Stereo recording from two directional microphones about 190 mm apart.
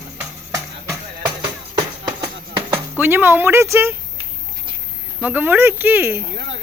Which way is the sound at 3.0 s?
10° right (ahead or behind).